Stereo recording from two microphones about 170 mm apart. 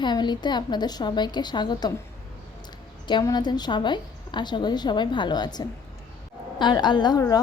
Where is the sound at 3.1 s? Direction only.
25° left (ahead or behind).